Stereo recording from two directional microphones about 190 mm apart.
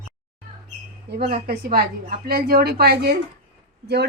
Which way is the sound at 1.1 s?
60° right (ahead or behind).